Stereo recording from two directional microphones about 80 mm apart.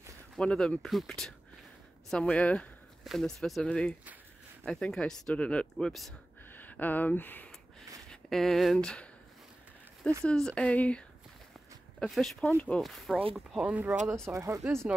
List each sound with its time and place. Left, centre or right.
0.4 s speech: centre
3.0 s speech: centre
3.6 s speech: centre
6.5 s speech: left
8.1 s speech: centre
8.8 s speech: centre
10.2 s speech: centre
12.0 s speech: centre
13.1 s speech: centre
13.8 s speech: right